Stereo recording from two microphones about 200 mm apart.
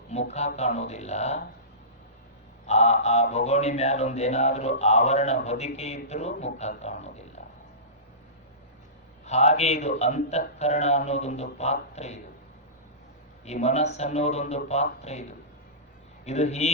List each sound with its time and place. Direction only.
0.1 s a man's voice: 35° left (ahead or behind)
2.6 s a man's voice: 35° left (ahead or behind)
9.2 s a man's voice: 35° left (ahead or behind)
13.4 s a man's voice: 35° left (ahead or behind)
16.2 s a man's voice: 35° left (ahead or behind)